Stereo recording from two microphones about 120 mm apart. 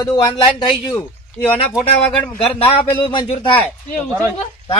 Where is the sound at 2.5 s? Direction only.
50° left (ahead or behind).